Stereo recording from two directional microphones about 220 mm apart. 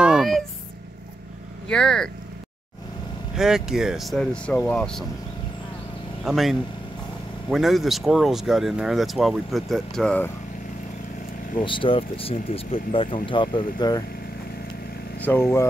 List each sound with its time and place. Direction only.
0.0 s a sound: centre (ahead or behind)
1.7 s speech: 5° left (ahead or behind)
3.3 s speech: centre (ahead or behind)
6.2 s speech: centre (ahead or behind)
11.5 s speech: 20° left (ahead or behind)
15.1 s speech: 10° left (ahead or behind)